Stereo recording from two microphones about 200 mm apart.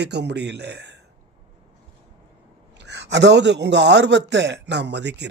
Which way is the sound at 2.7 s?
60° right (ahead or behind).